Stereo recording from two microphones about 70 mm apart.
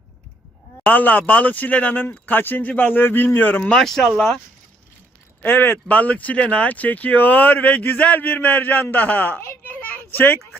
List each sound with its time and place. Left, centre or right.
0.9 s speech: left
3.7 s speech: centre
5.4 s speech: left
9.8 s a sound: left